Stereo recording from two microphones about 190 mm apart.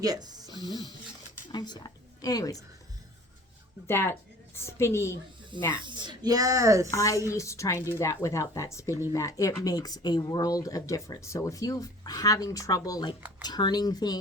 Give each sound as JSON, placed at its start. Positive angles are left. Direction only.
{"t": 0.0, "sound": "speech", "side_deg": -20}
{"t": 0.6, "sound": "a woman's voice", "side_deg": 20}
{"t": 3.8, "sound": "speech", "side_deg": 15}
{"t": 5.7, "sound": "speech", "side_deg": -25}
{"t": 6.9, "sound": "speech", "side_deg": 15}